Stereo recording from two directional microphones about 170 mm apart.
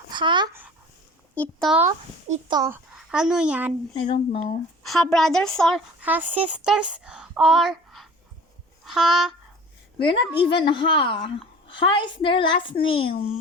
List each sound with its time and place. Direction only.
0.1 s speech: 30° right (ahead or behind)
1.4 s a woman's voice: centre (ahead or behind)
2.5 s a child's voice: 20° right (ahead or behind)
2.9 s speech: 5° right (ahead or behind)
3.9 s a woman's voice: 35° left (ahead or behind)
4.8 s a woman's voice: centre (ahead or behind)
6.0 s speech: 10° right (ahead or behind)
10.0 s a woman's voice: 30° left (ahead or behind)